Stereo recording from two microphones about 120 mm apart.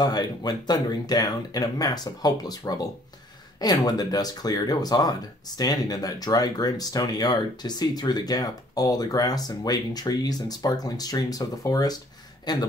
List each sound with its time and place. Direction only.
0.0 s speech: 35° left (ahead or behind)